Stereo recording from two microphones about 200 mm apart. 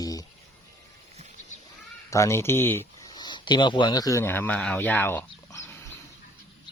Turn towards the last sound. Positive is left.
turn(degrees=10)  # may be behind; listen again after turning